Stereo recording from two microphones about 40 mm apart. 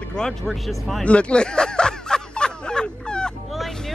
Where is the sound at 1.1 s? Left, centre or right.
Left.